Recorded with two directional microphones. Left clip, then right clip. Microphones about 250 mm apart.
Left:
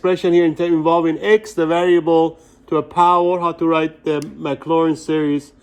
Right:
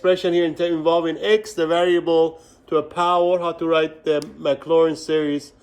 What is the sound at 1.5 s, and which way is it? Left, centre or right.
Speech, centre.